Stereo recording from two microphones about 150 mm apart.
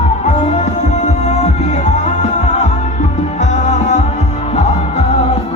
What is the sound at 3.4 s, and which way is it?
Music, 50° left (ahead or behind).